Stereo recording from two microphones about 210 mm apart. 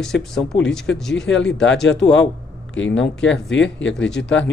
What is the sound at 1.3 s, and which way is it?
Speech, 60° left (ahead or behind).